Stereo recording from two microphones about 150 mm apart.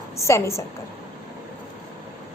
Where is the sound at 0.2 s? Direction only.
20° left (ahead or behind).